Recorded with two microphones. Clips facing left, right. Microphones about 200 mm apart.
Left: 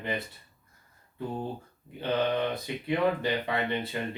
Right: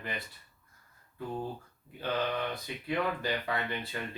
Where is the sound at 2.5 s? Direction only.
25° left (ahead or behind).